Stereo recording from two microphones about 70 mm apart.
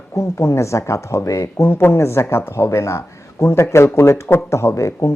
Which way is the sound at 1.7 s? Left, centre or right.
Left.